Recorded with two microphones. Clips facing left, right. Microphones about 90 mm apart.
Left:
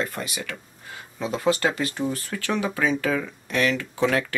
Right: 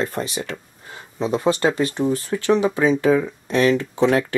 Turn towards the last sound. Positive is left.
turn(degrees=-25)  # may be behind; listen again after turning